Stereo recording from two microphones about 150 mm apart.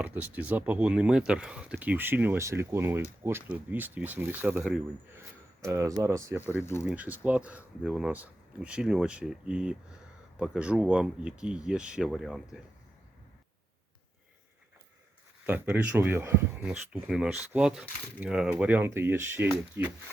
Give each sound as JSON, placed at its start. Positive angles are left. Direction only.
{"t": 0.0, "sound": "speech", "side_deg": -10}
{"t": 5.6, "sound": "speech", "side_deg": -20}
{"t": 15.4, "sound": "speech", "side_deg": -10}
{"t": 16.6, "sound": "speech", "side_deg": -5}